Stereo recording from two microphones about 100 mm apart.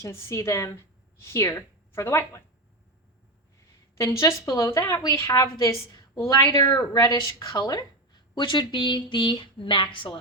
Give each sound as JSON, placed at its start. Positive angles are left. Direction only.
{"t": 0.0, "sound": "a woman's voice", "side_deg": 30}
{"t": 3.9, "sound": "a woman's voice", "side_deg": 30}
{"t": 8.4, "sound": "a woman's voice", "side_deg": 50}